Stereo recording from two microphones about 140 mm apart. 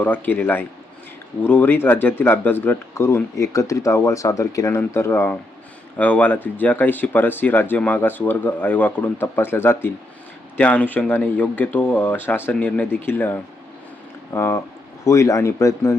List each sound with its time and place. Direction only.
0.0 s speech: 15° left (ahead or behind)